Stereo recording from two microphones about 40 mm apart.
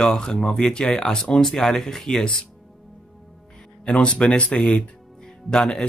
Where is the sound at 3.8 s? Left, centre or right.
Left.